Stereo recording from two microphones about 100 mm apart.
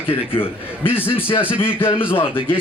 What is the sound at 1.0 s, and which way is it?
Speech, 20° left (ahead or behind).